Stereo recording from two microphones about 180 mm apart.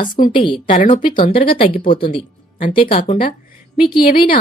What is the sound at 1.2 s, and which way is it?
Speech, 55° left (ahead or behind).